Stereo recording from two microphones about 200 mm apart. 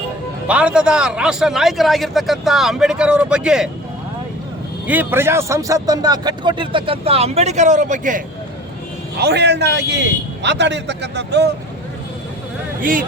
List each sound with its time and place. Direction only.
0.4 s a man's voice: 5° right (ahead or behind)
4.9 s a man's voice: 10° right (ahead or behind); by 8.2 s 40° right (ahead or behind)
9.1 s a man's voice: 55° right (ahead or behind)
12.8 s speech: 40° right (ahead or behind)